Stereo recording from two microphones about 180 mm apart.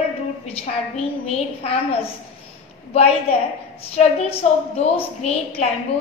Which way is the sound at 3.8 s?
35° left (ahead or behind).